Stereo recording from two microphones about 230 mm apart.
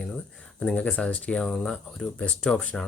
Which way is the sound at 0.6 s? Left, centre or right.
Centre.